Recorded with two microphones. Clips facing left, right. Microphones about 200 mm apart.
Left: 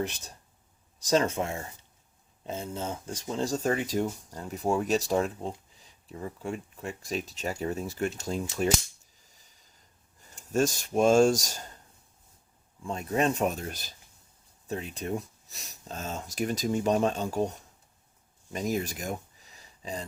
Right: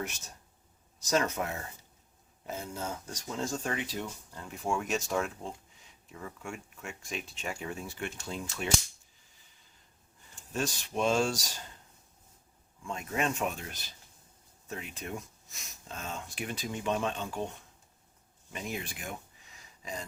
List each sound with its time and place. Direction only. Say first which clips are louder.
0.0 s speech: left 6 dB; 35° left (ahead or behind)
10.5 s speech: left 8 dB; 45° left (ahead or behind)
12.8 s speech: left 6 dB; 35° left (ahead or behind)